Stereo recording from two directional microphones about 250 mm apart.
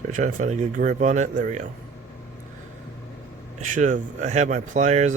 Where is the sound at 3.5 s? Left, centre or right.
Right.